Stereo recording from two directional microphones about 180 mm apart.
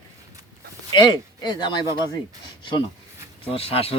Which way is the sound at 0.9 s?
25° left (ahead or behind).